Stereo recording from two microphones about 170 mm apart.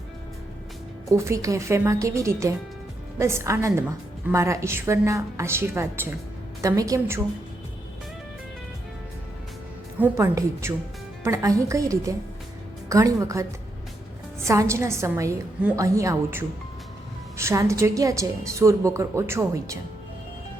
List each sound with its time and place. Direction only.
1.1 s a woman's voice: 15° right (ahead or behind)
10.0 s a woman's voice: 15° right (ahead or behind)